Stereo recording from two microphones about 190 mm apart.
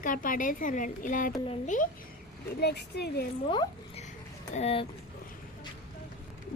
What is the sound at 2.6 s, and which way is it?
Speech, 60° left (ahead or behind).